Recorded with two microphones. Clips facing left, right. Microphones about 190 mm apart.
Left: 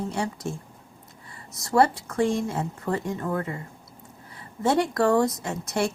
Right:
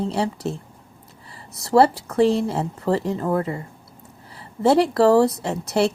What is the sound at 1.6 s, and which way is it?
A woman's voice, 35° right (ahead or behind).